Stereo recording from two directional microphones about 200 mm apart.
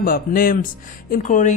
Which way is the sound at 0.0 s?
45° left (ahead or behind).